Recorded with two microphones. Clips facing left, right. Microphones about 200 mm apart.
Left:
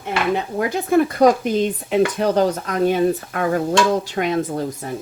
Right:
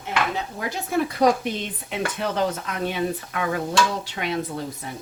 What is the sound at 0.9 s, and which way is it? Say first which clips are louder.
Speech: left 5 dB; 50° left (ahead or behind).